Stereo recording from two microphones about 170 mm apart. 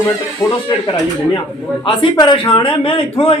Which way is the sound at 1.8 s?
30° left (ahead or behind).